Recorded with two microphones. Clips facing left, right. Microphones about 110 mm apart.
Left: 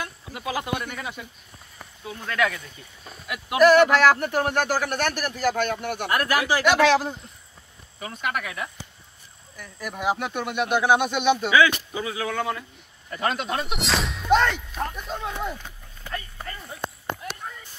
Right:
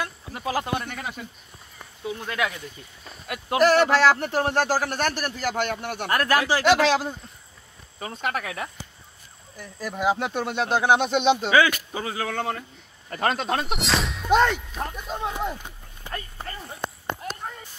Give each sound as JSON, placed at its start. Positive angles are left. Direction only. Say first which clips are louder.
{"t": 0.3, "sound": "speech", "louder": "right 1 dB", "side_deg": -40}
{"t": 2.0, "sound": "speech", "louder": "left 2 dB", "side_deg": -15}
{"t": 3.3, "sound": "a man's voice", "louder": "left 3 dB", "side_deg": -35}
{"t": 8.0, "sound": "a man's voice", "louder": "even", "side_deg": -35}
{"t": 13.7, "sound": "a sound", "louder": "right 1 dB", "side_deg": 0}
{"t": 14.3, "sound": "speech", "louder": "even", "side_deg": -10}
{"t": 14.7, "sound": "speech", "louder": "left 1 dB", "side_deg": 0}
{"t": 15.2, "sound": "horse", "louder": "right 4 dB", "side_deg": -15}
{"t": 17.2, "sound": "a sound", "louder": "right 2 dB", "side_deg": -45}